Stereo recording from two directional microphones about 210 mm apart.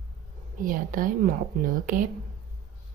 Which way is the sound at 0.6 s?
40° right (ahead or behind).